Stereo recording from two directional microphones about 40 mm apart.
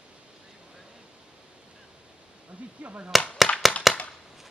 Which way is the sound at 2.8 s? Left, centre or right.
Right.